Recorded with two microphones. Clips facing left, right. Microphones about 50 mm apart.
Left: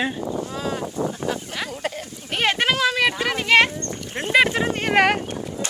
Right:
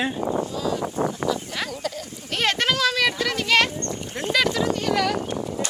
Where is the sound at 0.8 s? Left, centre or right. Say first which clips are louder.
Right 1 dB; right.